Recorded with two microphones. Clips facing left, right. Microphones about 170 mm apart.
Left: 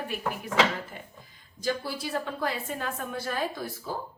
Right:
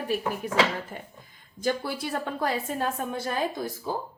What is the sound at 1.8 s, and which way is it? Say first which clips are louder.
Speech: right 2 dB; 55° right (ahead or behind).